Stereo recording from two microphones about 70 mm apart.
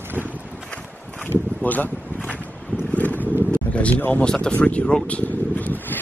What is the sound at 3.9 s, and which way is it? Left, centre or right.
Speech, left.